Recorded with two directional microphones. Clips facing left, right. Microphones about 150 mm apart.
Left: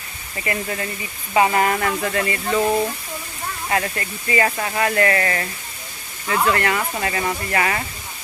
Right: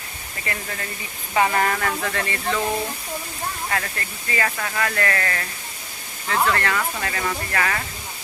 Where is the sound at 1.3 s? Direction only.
15° left (ahead or behind).